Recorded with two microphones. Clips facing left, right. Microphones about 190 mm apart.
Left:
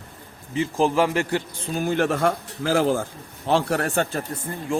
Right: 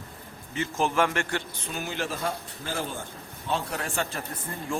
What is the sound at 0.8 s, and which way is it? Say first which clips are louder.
Speech: left 5 dB; 35° left (ahead or behind).